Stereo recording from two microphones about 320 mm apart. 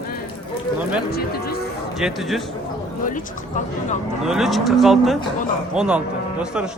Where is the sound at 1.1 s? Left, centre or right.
Left.